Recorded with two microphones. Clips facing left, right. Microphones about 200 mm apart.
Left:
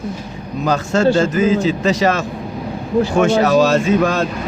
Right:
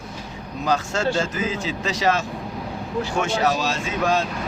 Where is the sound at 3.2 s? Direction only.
45° left (ahead or behind).